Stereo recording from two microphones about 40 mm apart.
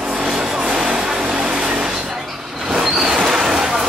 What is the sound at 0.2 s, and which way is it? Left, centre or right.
Vehicle, centre.